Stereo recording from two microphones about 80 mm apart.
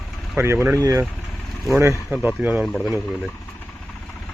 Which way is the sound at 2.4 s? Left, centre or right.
Centre.